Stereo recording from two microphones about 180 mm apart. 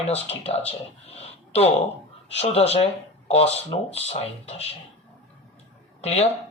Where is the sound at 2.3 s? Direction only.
35° left (ahead or behind).